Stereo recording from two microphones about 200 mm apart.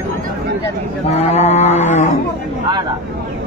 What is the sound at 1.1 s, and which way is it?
Cattle, 30° left (ahead or behind).